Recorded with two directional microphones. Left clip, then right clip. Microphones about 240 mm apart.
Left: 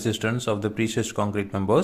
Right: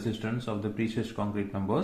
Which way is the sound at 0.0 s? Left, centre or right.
Left.